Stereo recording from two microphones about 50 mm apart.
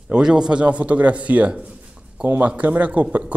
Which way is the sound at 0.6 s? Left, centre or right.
Right.